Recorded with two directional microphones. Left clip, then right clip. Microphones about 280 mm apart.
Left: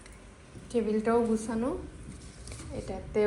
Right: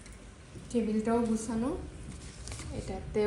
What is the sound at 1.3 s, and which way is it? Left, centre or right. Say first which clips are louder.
Speech: left 3 dB; centre.